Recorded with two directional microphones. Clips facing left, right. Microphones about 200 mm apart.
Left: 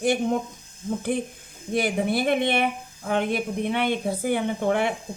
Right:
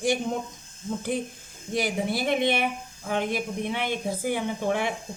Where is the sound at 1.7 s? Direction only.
55° left (ahead or behind).